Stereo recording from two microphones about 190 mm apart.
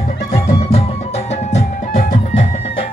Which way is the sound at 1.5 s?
40° left (ahead or behind).